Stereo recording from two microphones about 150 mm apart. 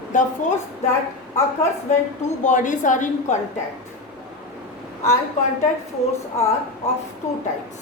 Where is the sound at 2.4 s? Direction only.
55° left (ahead or behind).